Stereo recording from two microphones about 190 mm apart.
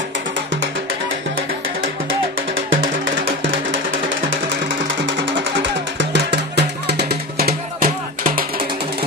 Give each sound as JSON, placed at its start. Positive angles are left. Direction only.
{"t": 5.9, "sound": "music", "side_deg": -60}